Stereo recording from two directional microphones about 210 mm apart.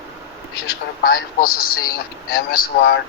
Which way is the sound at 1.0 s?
45° left (ahead or behind).